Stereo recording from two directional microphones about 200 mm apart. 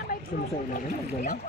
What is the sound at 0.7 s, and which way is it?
Speech, 45° left (ahead or behind).